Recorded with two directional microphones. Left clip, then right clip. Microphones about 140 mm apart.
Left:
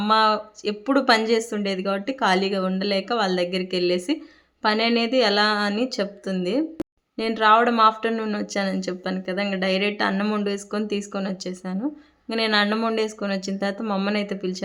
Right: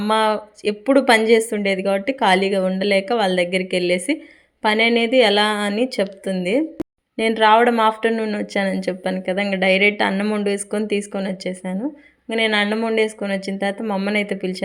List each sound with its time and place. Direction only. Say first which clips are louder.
0.0 s a woman's voice: right 1 dB; 15° right (ahead or behind)
14.2 s a woman's voice: right 5 dB; 20° right (ahead or behind)